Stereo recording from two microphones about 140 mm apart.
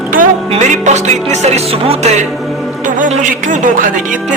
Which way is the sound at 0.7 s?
55° right (ahead or behind).